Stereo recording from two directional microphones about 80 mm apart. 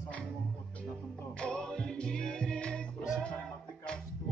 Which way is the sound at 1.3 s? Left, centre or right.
Centre.